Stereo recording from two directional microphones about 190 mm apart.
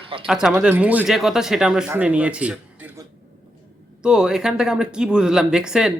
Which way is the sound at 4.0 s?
5° right (ahead or behind).